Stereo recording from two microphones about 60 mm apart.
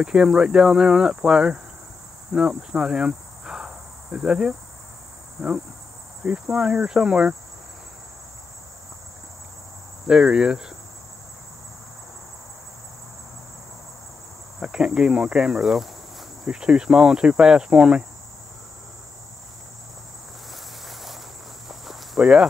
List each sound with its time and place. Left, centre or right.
0.0 s cricket: centre
2.3 s speech: centre
6.4 s cricket: centre
10.0 s cricket: centre
14.6 s cricket: centre
15.6 s cricket: centre
16.4 s cricket: centre
20.5 s a sound: centre
21.6 s snake: centre